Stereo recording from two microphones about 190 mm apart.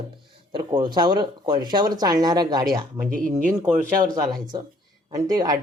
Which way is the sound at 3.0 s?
45° right (ahead or behind).